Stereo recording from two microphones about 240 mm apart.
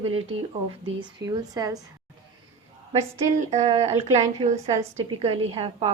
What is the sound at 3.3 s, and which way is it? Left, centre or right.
A woman's voice, right.